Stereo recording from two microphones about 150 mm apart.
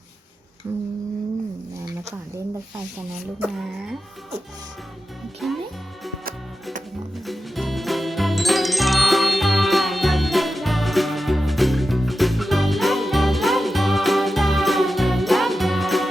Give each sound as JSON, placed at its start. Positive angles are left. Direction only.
{"t": 0.7, "sound": "humming", "side_deg": -15}
{"t": 1.8, "sound": "a sound", "side_deg": -20}
{"t": 3.4, "sound": "speech", "side_deg": -5}
{"t": 5.4, "sound": "music", "side_deg": 0}
{"t": 7.3, "sound": "music", "side_deg": 0}